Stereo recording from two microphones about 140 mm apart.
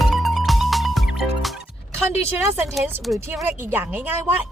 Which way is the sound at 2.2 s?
20° right (ahead or behind).